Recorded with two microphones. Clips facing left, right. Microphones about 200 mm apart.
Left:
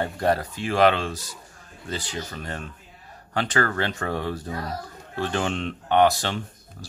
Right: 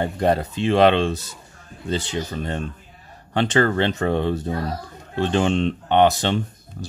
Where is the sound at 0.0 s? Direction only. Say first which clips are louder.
Right 3 dB; 20° right (ahead or behind).